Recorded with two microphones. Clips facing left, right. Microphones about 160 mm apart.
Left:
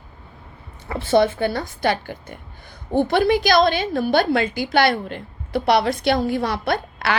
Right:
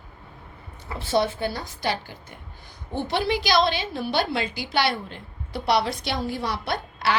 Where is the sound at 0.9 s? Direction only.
60° left (ahead or behind).